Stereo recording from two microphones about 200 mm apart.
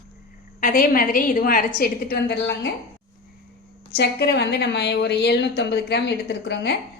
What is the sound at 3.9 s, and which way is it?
A woman's voice, 55° left (ahead or behind).